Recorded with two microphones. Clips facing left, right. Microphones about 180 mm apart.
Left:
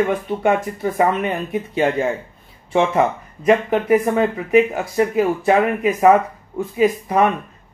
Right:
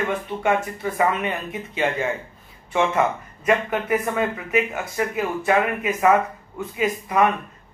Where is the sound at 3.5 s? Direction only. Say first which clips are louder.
Left 6 dB; 40° left (ahead or behind).